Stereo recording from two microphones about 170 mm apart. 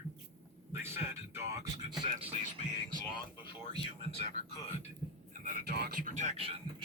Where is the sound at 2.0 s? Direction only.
30° right (ahead or behind).